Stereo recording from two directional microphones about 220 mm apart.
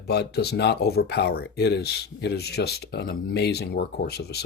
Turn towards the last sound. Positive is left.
turn(degrees=50)  # may be behind; listen again after turning